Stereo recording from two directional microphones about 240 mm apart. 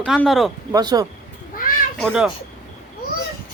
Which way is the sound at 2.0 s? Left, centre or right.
Centre.